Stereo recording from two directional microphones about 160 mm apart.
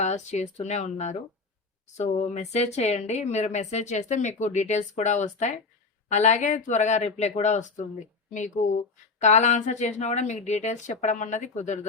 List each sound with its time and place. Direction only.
0.0 s speech: 45° left (ahead or behind)